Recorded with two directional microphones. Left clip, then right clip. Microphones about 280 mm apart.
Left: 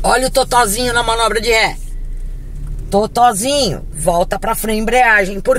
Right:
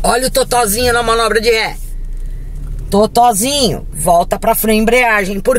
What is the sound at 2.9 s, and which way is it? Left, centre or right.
Speech, right.